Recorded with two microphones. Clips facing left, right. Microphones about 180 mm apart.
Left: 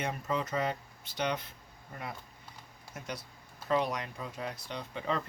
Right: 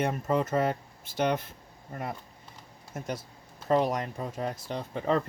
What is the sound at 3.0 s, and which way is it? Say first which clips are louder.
Speech: right 6 dB; 45° right (ahead or behind).